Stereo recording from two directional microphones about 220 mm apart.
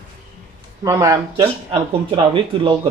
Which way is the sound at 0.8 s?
15° right (ahead or behind).